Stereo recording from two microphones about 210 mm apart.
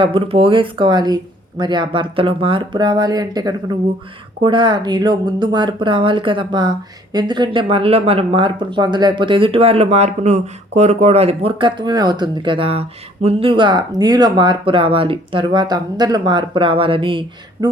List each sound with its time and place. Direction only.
0.0 s speech: 25° right (ahead or behind)